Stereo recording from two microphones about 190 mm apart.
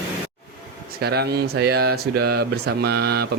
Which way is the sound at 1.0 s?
60° right (ahead or behind).